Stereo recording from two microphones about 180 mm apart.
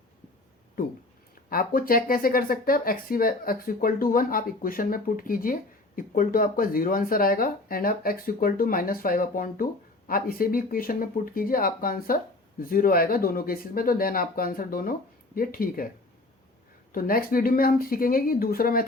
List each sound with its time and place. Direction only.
0.8 s speech: 55° left (ahead or behind)
16.9 s speech: 55° left (ahead or behind)